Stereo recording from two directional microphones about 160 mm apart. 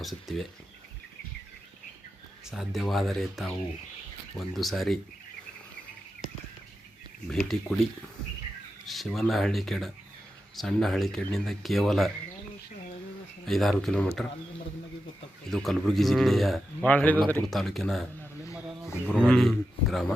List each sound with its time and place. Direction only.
0.0 s a man's voice: centre (ahead or behind)
2.5 s a man's voice: centre (ahead or behind)
7.3 s a man's voice: centre (ahead or behind)
8.9 s a man's voice: centre (ahead or behind)
13.5 s a man's voice: centre (ahead or behind)
15.4 s a man's voice: centre (ahead or behind)
19.2 s a man's voice: 5° left (ahead or behind)